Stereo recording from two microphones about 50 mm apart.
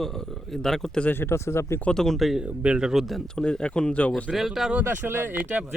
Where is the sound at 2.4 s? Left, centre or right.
Centre.